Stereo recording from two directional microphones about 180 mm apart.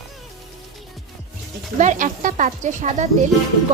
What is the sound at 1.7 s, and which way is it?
Speech, 45° right (ahead or behind).